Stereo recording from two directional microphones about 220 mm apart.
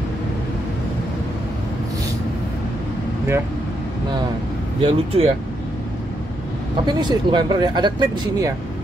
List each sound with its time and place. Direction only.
4.8 s speech: 25° right (ahead or behind)
6.9 s speech: 20° right (ahead or behind)